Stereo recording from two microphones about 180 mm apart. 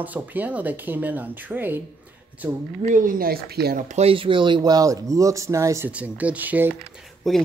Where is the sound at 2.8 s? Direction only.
45° right (ahead or behind).